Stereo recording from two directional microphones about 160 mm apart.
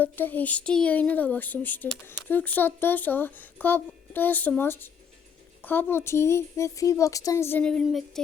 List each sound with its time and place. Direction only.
0.0 s speech: 10° left (ahead or behind)